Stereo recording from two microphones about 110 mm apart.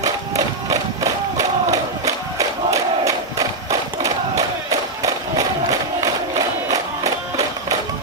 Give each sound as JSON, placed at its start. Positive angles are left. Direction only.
{"t": 1.7, "sound": "crowd", "side_deg": -30}
{"t": 4.0, "sound": "battle cry", "side_deg": -30}